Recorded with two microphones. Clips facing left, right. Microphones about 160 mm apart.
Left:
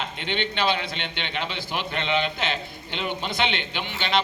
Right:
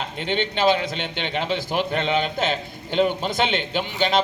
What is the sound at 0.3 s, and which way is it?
A man's voice, 40° right (ahead or behind).